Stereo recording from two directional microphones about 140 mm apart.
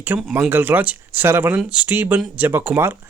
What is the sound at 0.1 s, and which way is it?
A man's voice, 25° right (ahead or behind).